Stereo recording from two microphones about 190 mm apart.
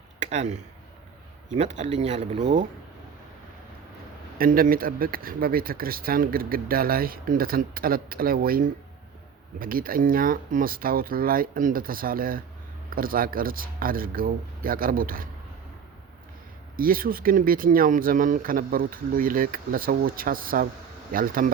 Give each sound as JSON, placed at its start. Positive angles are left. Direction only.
{"t": 0.2, "sound": "speech", "side_deg": -40}
{"t": 4.4, "sound": "speech", "side_deg": -50}
{"t": 16.7, "sound": "speech", "side_deg": -50}